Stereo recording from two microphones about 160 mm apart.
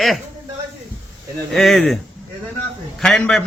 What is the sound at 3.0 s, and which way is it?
Speech, 5° left (ahead or behind).